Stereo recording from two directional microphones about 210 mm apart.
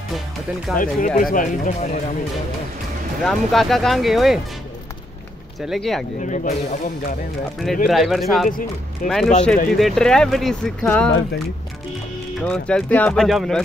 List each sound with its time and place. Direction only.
0.7 s speech: 40° left (ahead or behind)
3.3 s speech: centre (ahead or behind)
5.7 s speech: centre (ahead or behind)
6.2 s speech: 35° left (ahead or behind)
7.6 s speech: centre (ahead or behind)
12.4 s speech: 5° left (ahead or behind)